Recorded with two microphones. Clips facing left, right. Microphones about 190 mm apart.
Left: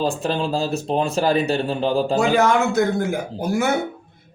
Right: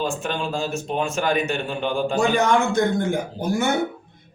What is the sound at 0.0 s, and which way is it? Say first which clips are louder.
Speech: left 4 dB; 35° left (ahead or behind).